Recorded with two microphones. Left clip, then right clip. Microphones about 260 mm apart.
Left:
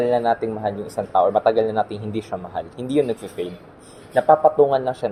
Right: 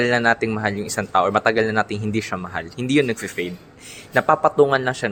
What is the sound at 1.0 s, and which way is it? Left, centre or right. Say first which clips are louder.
Speech: left 1 dB; right.